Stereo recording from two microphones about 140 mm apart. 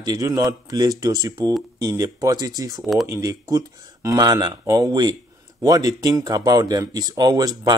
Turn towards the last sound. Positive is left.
turn(degrees=-30)  # may be behind; listen again after turning